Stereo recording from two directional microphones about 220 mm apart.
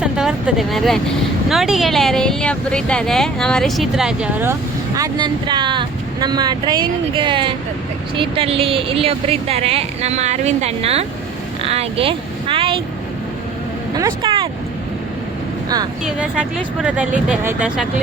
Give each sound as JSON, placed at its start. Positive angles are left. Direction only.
{"t": 0.0, "sound": "speech", "side_deg": -5}
{"t": 4.9, "sound": "speech", "side_deg": -15}
{"t": 11.6, "sound": "vehicle", "side_deg": -25}
{"t": 13.9, "sound": "vehicle", "side_deg": -20}
{"t": 16.0, "sound": "speech", "side_deg": -5}